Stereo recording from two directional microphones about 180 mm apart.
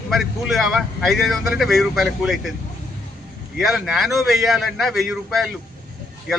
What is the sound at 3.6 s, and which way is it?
A man's voice, centre (ahead or behind).